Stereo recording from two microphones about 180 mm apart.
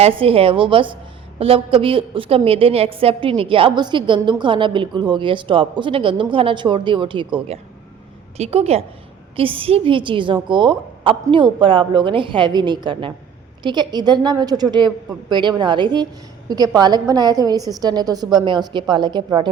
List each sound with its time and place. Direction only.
0.0 s a woman's voice: 30° right (ahead or behind)